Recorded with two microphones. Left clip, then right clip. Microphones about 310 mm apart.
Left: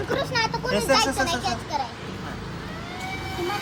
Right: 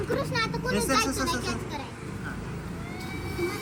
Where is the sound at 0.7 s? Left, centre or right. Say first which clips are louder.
Left 6 dB; left.